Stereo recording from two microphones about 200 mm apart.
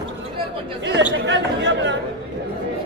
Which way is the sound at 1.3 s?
65° right (ahead or behind).